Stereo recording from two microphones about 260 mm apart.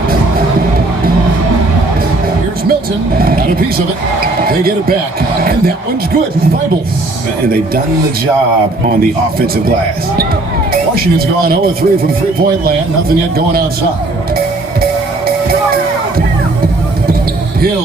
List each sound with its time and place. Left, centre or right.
3.2 s speech: right
4.4 s speech: right
11.4 s speech: right